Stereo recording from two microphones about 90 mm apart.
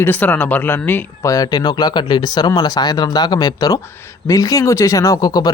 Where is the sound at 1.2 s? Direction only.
40° left (ahead or behind).